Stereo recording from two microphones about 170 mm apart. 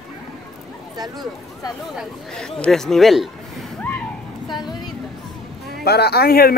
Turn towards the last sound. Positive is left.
turn(degrees=65)  # may be behind; listen again after turning